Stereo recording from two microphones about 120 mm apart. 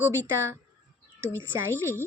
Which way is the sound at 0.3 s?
20° right (ahead or behind).